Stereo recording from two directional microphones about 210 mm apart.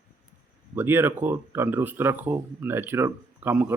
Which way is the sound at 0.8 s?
10° right (ahead or behind).